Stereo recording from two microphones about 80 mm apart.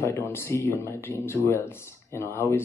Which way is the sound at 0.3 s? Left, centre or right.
Left.